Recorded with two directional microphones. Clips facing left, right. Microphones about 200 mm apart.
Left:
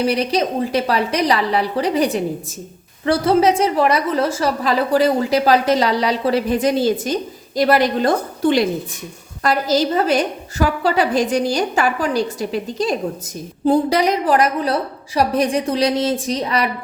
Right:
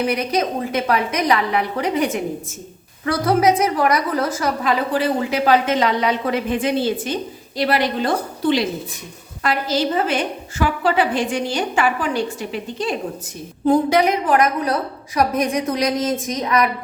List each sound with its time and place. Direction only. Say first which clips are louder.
0.0 s a woman's voice: left 2 dB; 30° left (ahead or behind)